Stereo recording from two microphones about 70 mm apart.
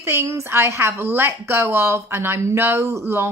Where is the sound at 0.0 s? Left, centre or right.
Right.